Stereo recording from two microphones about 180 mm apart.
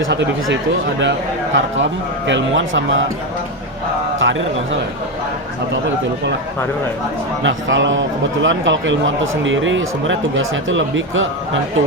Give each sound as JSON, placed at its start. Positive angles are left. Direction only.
{"t": 0.0, "sound": "a man's voice", "side_deg": -85}
{"t": 4.2, "sound": "a man's voice", "side_deg": -90}
{"t": 7.4, "sound": "a man's voice", "side_deg": -90}